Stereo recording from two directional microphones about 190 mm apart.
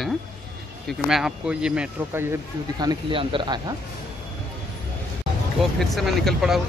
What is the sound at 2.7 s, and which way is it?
Speech, 25° right (ahead or behind).